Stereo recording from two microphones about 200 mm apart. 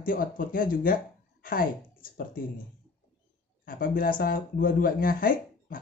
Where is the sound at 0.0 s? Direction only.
45° left (ahead or behind).